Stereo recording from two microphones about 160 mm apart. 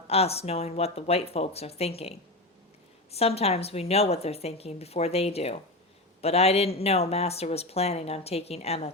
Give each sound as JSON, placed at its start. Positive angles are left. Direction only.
{"t": 0.1, "sound": "a woman's voice", "side_deg": 40}